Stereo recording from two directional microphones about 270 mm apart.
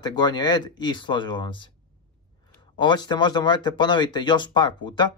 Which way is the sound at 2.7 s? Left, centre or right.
Centre.